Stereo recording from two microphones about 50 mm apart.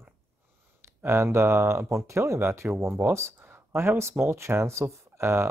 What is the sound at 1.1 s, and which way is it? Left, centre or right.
Speech, right.